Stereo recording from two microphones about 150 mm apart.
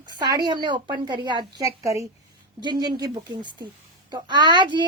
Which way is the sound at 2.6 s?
30° right (ahead or behind).